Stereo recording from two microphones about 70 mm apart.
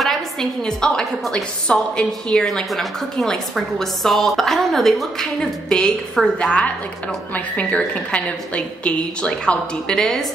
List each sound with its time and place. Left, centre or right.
0.0 s a woman's voice: centre